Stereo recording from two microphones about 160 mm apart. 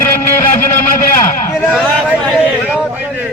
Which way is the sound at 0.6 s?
55° left (ahead or behind).